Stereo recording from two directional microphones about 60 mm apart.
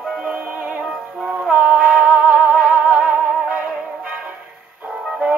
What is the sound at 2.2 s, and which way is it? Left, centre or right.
Music, right.